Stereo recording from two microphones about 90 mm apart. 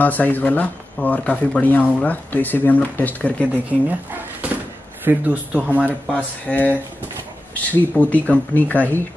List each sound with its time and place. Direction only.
0.0 s speech: 20° left (ahead or behind)
3.8 s speech: 20° right (ahead or behind)
6.4 s speech: 20° left (ahead or behind)